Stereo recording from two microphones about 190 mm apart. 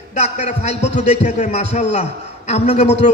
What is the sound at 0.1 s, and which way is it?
A man's voice, 35° left (ahead or behind).